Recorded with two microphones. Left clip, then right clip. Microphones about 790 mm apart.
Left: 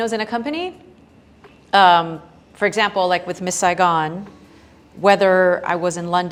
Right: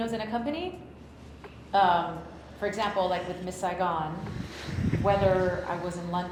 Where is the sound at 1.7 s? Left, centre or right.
Left.